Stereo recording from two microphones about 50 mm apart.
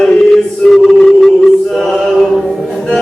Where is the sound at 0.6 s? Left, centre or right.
Centre.